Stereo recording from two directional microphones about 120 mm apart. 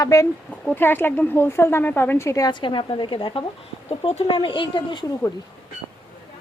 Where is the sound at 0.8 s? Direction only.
15° left (ahead or behind).